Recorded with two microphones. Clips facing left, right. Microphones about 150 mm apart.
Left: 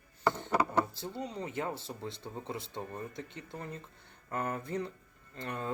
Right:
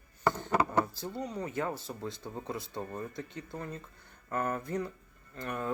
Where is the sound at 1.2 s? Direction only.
25° left (ahead or behind).